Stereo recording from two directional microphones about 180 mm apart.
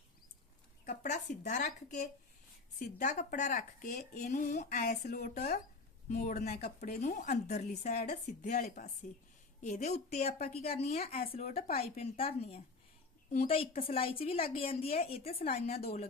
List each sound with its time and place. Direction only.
0.9 s a woman's voice: 45° left (ahead or behind)
4.8 s speech: 60° left (ahead or behind)
7.0 s a woman's voice: 45° left (ahead or behind)